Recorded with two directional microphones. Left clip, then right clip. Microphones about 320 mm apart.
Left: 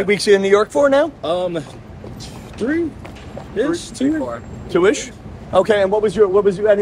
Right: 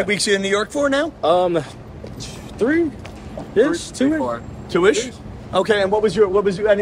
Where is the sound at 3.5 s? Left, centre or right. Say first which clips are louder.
Right 3 dB; right.